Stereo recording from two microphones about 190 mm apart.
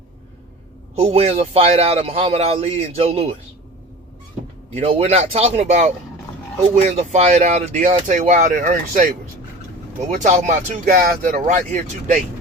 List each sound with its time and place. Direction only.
0.9 s a man's voice: 30° right (ahead or behind)
4.7 s a man's voice: 35° right (ahead or behind)
10.2 s a man's voice: 40° right (ahead or behind)